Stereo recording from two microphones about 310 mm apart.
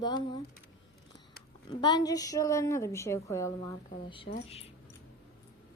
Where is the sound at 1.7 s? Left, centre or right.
Centre.